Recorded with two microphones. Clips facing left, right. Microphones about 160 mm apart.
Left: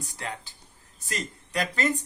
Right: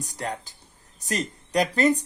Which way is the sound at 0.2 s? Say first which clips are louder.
Right 6 dB; 40° right (ahead or behind).